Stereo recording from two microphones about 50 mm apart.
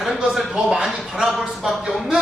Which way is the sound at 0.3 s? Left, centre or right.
Centre.